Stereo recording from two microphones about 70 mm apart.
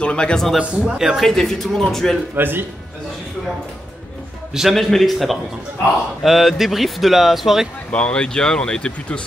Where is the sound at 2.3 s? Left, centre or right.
Right.